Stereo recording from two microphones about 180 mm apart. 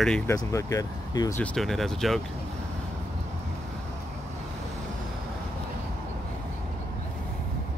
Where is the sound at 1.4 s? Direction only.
5° left (ahead or behind).